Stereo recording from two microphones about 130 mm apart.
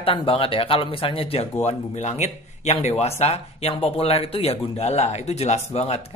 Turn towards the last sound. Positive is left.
turn(degrees=55)  # may be behind; listen again after turning